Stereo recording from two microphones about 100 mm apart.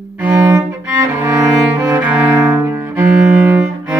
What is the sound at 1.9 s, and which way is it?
Cello, 15° right (ahead or behind).